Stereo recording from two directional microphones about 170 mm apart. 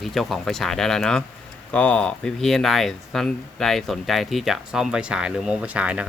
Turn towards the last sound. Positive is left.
turn(degrees=-5)  # may be behind; listen again after turning